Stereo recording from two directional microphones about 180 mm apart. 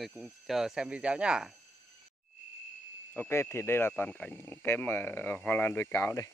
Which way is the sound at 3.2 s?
15° left (ahead or behind).